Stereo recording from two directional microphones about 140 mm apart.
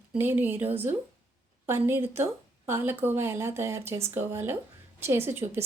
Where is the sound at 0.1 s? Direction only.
15° right (ahead or behind).